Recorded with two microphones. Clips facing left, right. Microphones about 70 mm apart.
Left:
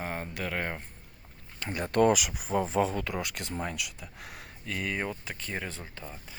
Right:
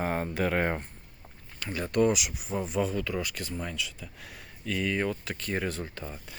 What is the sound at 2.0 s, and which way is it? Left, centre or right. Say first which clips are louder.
Speech: left 2 dB; left.